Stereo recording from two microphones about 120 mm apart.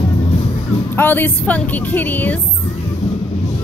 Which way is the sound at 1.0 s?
15° left (ahead or behind).